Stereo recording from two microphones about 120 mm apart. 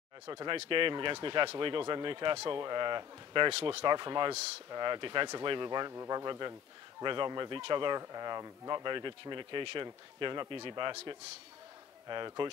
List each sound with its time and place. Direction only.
0.3 s speech: 45° right (ahead or behind)
3.8 s speech: 40° right (ahead or behind)